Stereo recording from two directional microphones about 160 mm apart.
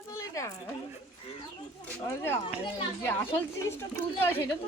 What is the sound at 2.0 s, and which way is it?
Speech, 15° left (ahead or behind).